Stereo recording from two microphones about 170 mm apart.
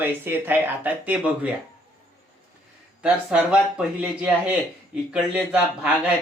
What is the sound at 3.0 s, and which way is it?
Speech, 5° right (ahead or behind).